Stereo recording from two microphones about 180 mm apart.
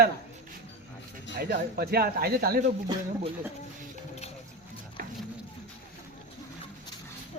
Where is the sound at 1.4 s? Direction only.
55° right (ahead or behind).